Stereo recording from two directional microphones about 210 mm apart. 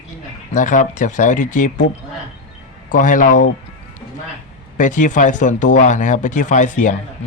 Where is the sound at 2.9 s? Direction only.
40° left (ahead or behind).